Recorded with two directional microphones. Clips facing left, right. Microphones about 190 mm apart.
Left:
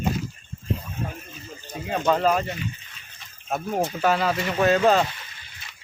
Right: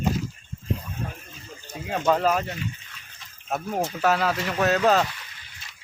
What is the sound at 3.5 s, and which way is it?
Speech, centre (ahead or behind).